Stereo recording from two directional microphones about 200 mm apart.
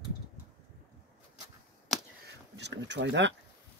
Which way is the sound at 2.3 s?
60° right (ahead or behind).